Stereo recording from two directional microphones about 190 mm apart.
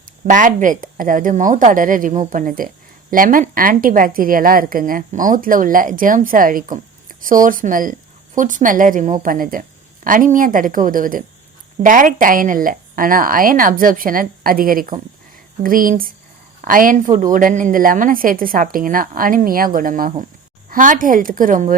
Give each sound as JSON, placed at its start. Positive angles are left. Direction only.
{"t": 0.3, "sound": "a woman's voice", "side_deg": -45}